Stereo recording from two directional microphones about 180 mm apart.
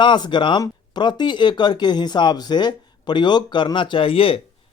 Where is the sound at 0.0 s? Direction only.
25° left (ahead or behind).